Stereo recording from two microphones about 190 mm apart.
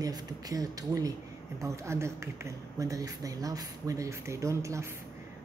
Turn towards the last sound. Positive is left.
turn(degrees=-15)  # may be behind; listen again after turning